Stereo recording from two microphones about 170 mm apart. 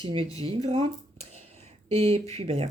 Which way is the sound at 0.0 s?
35° right (ahead or behind).